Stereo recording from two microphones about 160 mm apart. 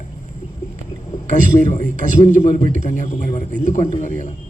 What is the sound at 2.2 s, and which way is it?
A man's voice, 50° left (ahead or behind).